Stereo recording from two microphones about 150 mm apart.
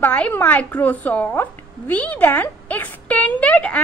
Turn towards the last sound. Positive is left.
turn(degrees=10)  # may be behind; listen again after turning